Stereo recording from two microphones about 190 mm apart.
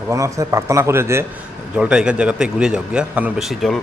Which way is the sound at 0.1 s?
15° right (ahead or behind).